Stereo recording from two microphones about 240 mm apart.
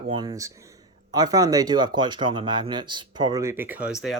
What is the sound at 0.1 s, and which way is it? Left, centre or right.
Speech, centre.